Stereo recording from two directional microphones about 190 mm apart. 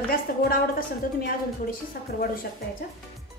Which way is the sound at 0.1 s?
50° left (ahead or behind).